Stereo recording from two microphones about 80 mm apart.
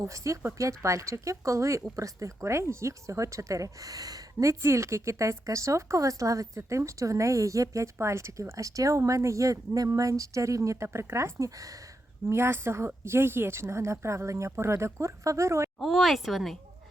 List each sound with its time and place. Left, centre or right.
0.0 s speech: right
12.3 s speech: right
15.8 s speech: centre